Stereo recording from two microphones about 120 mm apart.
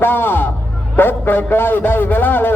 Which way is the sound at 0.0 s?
15° left (ahead or behind).